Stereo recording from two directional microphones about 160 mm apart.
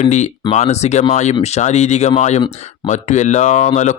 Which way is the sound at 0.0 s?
45° left (ahead or behind).